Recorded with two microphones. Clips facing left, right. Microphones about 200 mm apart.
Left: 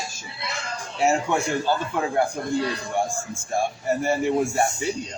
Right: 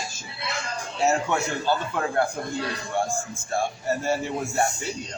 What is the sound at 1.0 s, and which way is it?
A man's voice, 15° left (ahead or behind).